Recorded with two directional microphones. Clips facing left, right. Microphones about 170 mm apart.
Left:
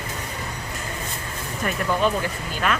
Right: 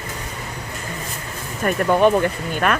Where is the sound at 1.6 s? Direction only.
55° right (ahead or behind).